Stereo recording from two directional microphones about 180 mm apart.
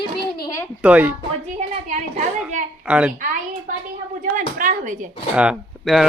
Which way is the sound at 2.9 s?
5° right (ahead or behind).